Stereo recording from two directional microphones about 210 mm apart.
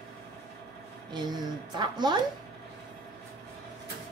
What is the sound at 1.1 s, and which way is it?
A woman's voice, 20° right (ahead or behind).